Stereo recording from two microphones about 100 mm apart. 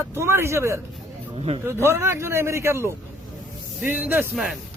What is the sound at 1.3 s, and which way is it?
Speech, 90° right.